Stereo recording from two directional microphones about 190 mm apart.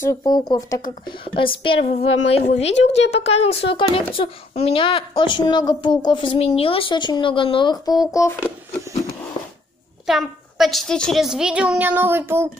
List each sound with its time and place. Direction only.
0.0 s speech: 15° left (ahead or behind); by 2.7 s 35° left (ahead or behind)
2.7 s a woman's voice: 70° left (ahead or behind)
3.2 s a child's voice: 30° left (ahead or behind); by 8.5 s 15° left (ahead or behind)
10.0 s a child's voice: centre (ahead or behind)